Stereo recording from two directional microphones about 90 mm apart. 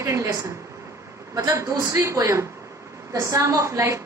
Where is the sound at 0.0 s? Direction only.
35° right (ahead or behind).